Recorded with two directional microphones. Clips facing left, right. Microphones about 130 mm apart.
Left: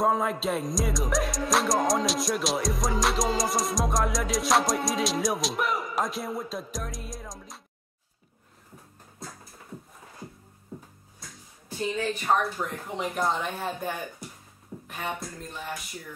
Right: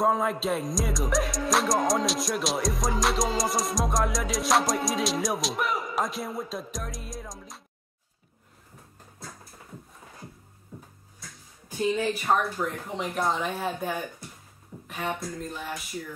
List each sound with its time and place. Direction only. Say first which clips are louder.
0.0 s music: even; centre (ahead or behind)
12.0 s music: left 3 dB; 5° right (ahead or behind)